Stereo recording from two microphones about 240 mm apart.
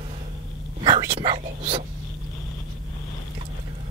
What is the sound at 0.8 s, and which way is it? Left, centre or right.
Whispering, centre.